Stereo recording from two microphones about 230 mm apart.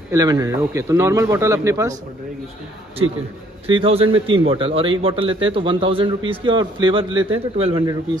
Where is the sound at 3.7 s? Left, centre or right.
Right.